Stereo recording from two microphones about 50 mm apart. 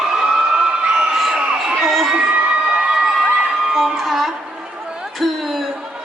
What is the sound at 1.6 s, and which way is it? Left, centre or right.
Crowd, centre.